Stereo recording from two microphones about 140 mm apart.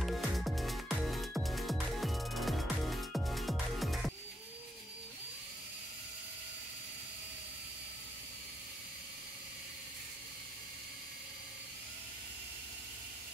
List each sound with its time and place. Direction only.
0.0 s music: centre (ahead or behind)